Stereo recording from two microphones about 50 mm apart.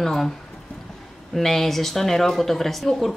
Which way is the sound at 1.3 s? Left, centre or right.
Centre.